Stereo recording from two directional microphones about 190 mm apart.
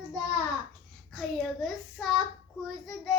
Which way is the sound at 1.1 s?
Centre (ahead or behind).